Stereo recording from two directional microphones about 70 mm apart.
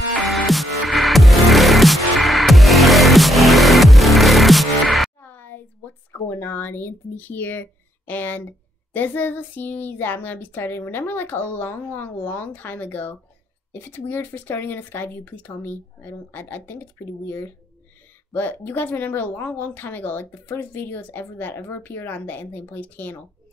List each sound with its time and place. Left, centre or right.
0.3 s music: centre
5.2 s a sound: left
6.1 s speech: left
18.3 s speech: left